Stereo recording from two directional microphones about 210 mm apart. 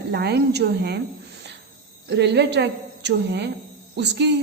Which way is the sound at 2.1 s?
55° right (ahead or behind).